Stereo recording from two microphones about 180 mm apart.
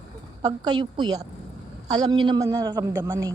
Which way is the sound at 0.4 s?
25° right (ahead or behind).